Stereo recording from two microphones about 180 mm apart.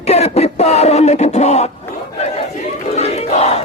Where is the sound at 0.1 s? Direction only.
35° left (ahead or behind).